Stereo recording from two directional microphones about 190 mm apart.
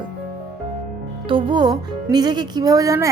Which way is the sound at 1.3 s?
25° right (ahead or behind).